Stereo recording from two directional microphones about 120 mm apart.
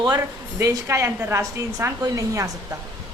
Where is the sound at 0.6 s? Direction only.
25° right (ahead or behind).